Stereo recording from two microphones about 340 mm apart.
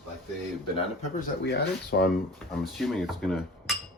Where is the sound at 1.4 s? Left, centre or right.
Left.